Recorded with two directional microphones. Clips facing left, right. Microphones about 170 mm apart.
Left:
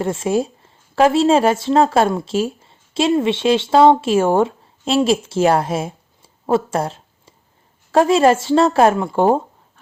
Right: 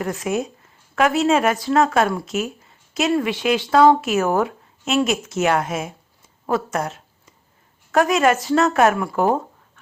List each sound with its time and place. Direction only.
0.0 s a woman's voice: 30° left (ahead or behind)